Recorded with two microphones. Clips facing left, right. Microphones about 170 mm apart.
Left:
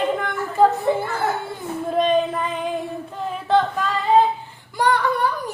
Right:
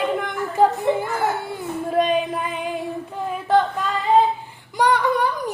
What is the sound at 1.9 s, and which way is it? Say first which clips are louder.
Female singing: left 1 dB; 10° right (ahead or behind).